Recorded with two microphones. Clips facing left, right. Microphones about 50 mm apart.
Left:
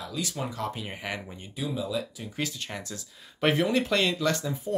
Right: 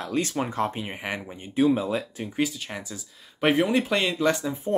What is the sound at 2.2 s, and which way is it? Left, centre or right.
Speech, centre.